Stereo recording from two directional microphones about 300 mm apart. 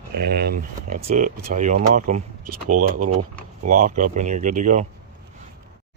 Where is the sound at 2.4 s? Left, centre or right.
Right.